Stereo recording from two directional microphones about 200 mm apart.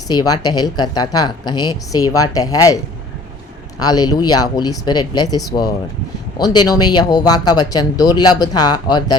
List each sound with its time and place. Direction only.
0.1 s speech: 20° left (ahead or behind)
3.8 s speech: 20° left (ahead or behind)